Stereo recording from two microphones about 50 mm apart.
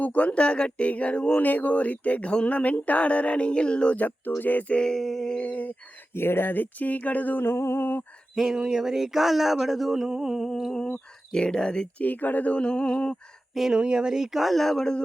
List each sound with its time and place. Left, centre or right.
0.0 s speech: left
4.7 s speech: centre
4.9 s speech: centre
5.4 s speech: left
6.1 s speech: left
7.4 s a sound: left
8.4 s a sound: centre
10.7 s speech: centre
12.0 s speech: left; by 13.1 s centre
13.5 s speech: centre
13.7 s a sound: centre